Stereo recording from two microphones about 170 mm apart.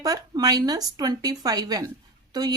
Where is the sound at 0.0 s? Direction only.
20° right (ahead or behind).